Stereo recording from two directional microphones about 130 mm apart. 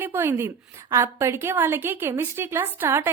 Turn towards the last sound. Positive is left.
turn(degrees=-20)  # may be behind; listen again after turning